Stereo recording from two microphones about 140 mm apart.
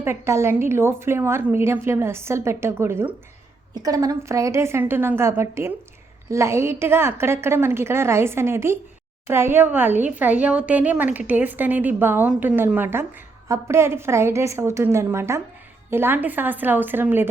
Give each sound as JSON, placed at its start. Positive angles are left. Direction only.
{"t": 0.0, "sound": "a woman's voice", "side_deg": -20}